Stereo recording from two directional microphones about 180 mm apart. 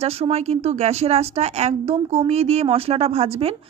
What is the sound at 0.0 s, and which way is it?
A woman's voice, 35° right (ahead or behind).